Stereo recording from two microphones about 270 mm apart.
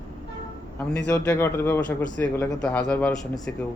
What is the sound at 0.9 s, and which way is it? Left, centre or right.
Speech, centre.